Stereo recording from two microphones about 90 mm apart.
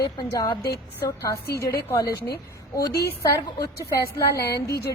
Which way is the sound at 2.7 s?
45° left (ahead or behind).